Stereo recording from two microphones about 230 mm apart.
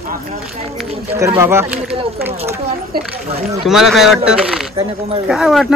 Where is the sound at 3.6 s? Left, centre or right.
Centre.